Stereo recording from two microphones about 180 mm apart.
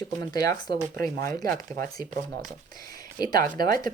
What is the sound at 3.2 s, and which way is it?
Speech, 20° left (ahead or behind).